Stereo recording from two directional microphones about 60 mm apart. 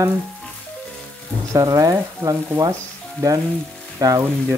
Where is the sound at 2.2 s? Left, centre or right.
Right.